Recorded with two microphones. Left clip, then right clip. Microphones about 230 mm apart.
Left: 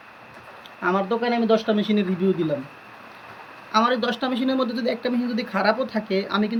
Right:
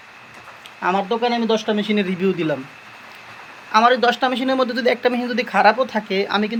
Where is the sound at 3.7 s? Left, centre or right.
Centre.